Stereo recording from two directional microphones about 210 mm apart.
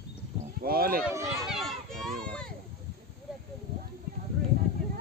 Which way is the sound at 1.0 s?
15° right (ahead or behind).